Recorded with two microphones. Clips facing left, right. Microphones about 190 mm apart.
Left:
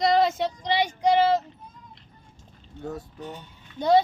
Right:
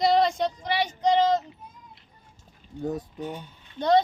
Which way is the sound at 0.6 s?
15° left (ahead or behind).